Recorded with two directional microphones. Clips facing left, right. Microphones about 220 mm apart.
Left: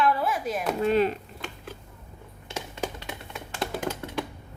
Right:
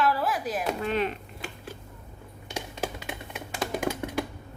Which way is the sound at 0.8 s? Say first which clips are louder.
Left 7 dB; 35° left (ahead or behind).